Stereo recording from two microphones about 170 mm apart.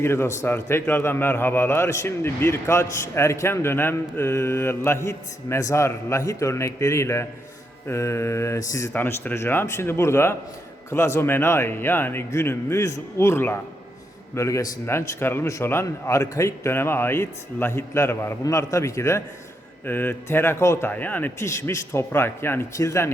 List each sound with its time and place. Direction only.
0.0 s a man's voice: 15° left (ahead or behind)